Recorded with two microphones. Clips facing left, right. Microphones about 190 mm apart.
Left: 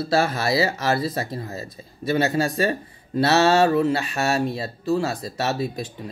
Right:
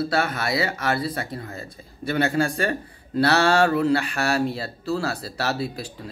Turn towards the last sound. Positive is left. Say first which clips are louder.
# left 2 dB
turn(degrees=20)  # may be behind; listen again after turning